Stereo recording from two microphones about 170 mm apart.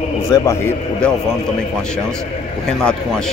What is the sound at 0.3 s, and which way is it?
Speech, 15° left (ahead or behind).